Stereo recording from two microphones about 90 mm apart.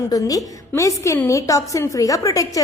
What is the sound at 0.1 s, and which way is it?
A woman's voice, 40° left (ahead or behind).